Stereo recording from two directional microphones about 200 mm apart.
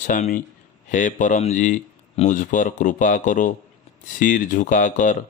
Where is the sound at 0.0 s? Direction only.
40° left (ahead or behind).